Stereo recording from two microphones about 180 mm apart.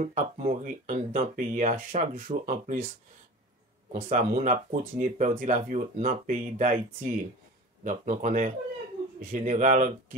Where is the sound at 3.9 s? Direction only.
40° right (ahead or behind).